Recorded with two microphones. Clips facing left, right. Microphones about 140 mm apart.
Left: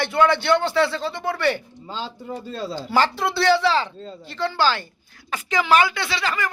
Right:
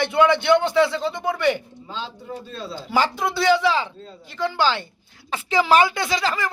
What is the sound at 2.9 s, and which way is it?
A man's voice, 10° right (ahead or behind).